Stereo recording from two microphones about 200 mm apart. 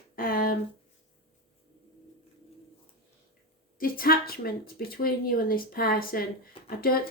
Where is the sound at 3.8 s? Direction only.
45° left (ahead or behind).